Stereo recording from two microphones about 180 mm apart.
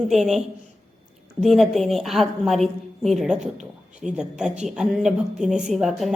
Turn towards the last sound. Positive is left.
turn(degrees=0)  # may be behind; listen again after turning